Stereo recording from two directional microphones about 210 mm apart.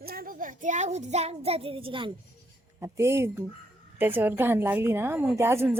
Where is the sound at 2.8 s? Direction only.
10° right (ahead or behind).